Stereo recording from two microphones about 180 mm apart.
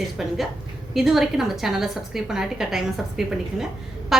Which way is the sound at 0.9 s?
Centre (ahead or behind).